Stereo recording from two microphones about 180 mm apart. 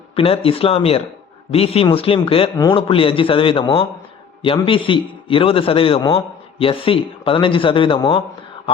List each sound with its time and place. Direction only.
0.2 s a man's voice: 30° left (ahead or behind)